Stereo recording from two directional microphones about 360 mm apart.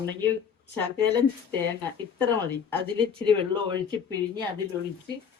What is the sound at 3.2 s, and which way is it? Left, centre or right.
Speech, centre.